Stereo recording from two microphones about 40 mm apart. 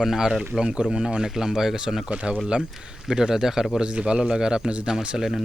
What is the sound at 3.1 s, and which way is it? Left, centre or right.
Speech, centre.